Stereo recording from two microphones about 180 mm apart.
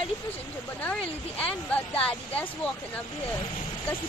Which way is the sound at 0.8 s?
10° left (ahead or behind).